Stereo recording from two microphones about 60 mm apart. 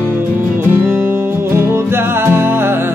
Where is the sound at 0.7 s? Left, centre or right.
Right.